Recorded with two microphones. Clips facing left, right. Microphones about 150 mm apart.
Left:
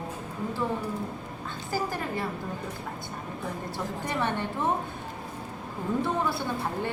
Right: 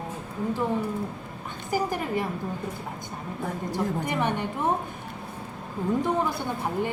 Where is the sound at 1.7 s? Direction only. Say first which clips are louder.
Right 4 dB; 15° right (ahead or behind).